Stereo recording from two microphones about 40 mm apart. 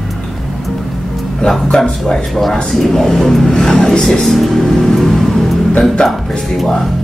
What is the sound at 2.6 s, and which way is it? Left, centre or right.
Speech, centre.